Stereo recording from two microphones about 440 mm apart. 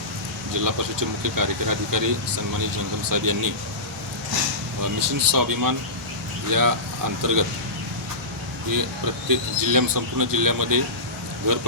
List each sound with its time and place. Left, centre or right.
0.6 s speech: right
4.8 s speech: right
9.3 s speech: right